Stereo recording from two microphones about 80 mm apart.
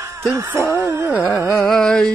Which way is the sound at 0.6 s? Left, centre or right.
Right.